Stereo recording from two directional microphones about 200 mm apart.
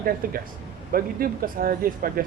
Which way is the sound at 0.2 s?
45° right (ahead or behind).